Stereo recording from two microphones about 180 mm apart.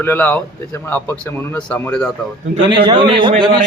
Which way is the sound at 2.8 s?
25° right (ahead or behind).